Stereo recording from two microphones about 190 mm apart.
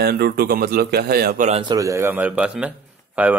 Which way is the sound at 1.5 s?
25° right (ahead or behind).